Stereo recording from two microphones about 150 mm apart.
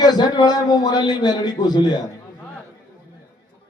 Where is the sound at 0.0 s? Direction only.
30° left (ahead or behind).